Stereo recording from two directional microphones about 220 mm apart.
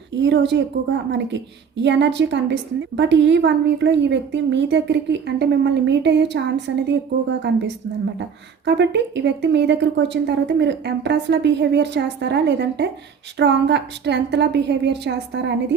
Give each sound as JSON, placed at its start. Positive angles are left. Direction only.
{"t": 0.2, "sound": "a woman's voice", "side_deg": -55}